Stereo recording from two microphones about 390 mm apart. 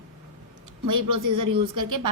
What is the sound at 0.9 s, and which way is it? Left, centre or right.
A woman's voice, right.